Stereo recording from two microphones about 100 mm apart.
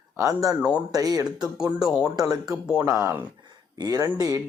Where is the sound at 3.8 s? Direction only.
40° right (ahead or behind).